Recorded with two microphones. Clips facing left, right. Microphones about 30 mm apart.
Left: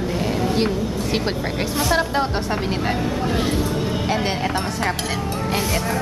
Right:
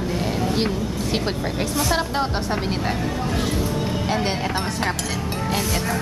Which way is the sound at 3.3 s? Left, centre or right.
Left.